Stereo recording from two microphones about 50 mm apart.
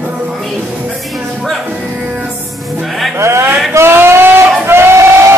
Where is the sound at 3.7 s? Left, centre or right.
Right.